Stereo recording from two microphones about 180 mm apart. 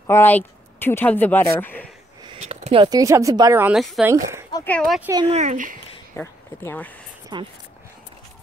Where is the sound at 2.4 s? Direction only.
35° right (ahead or behind); by 4.5 s 15° right (ahead or behind).